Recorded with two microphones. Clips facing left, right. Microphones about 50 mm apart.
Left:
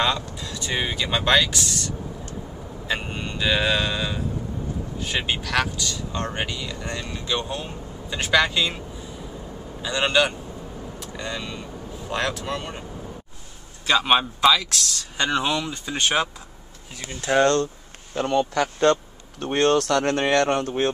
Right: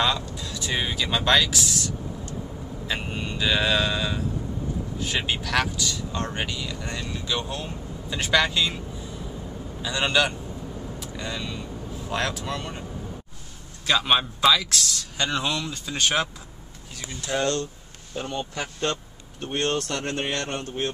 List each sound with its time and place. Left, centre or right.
0.0 s speech: centre
2.9 s speech: centre
7.0 s speech: centre
11.0 s vehicle: centre
11.3 s speech: centre
13.8 s speech: centre
15.1 s speech: centre
17.3 s speech: left
18.2 s speech: left